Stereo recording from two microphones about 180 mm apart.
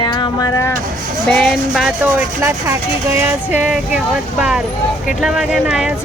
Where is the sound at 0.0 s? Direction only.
20° left (ahead or behind).